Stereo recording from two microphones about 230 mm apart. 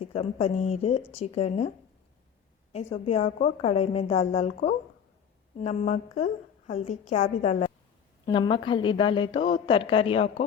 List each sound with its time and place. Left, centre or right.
0.0 s a woman's voice: left
2.9 s a woman's voice: left